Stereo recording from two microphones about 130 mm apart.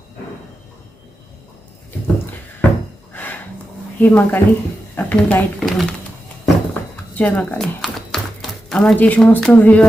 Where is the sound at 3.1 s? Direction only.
15° left (ahead or behind).